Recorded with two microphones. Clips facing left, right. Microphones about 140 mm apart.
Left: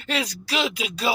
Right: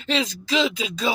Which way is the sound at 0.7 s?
10° left (ahead or behind).